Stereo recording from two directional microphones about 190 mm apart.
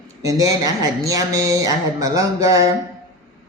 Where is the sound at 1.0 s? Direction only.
15° right (ahead or behind).